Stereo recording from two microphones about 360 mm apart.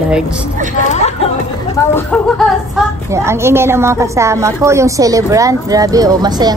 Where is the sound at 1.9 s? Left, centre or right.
Centre.